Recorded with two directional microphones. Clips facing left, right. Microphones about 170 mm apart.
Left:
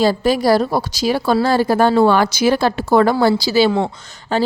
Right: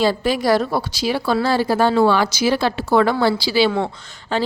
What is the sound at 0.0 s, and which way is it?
A woman's voice, 40° left (ahead or behind).